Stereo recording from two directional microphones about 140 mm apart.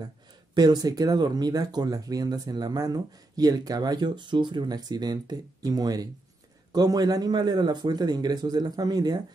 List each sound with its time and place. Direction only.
0.6 s speech: 30° right (ahead or behind)